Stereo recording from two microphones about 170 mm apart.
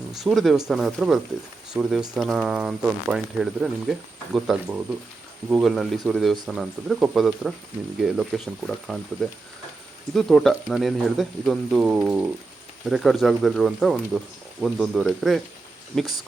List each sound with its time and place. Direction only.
0.1 s speech: centre (ahead or behind)
10.2 s speech: centre (ahead or behind)